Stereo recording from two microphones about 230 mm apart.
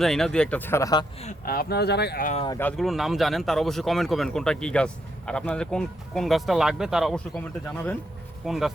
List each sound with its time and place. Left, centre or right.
0.0 s speech: centre
1.2 s speech: left
2.6 s speech: centre
8.4 s speech: centre